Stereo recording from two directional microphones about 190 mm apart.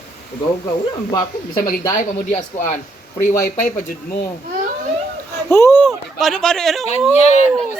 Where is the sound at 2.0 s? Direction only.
40° left (ahead or behind).